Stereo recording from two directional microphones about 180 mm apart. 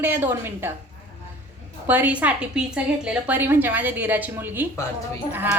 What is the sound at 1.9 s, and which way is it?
A woman's voice, 10° right (ahead or behind).